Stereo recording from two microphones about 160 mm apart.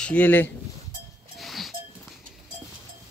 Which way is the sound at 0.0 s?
10° left (ahead or behind).